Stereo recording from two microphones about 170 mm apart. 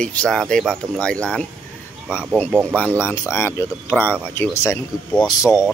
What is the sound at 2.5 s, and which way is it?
Speech, 10° right (ahead or behind).